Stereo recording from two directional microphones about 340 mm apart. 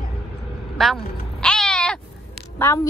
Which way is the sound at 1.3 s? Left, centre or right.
Centre.